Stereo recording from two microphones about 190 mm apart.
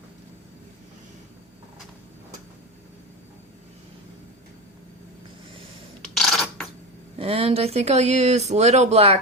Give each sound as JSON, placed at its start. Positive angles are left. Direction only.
{"t": 6.1, "sound": "coin", "side_deg": 0}
{"t": 7.2, "sound": "speech", "side_deg": -30}